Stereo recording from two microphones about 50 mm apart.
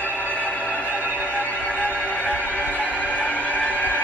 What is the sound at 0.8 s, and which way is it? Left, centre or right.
Music, right.